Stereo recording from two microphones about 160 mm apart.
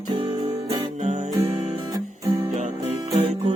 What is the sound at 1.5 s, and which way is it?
Guitar, 20° right (ahead or behind).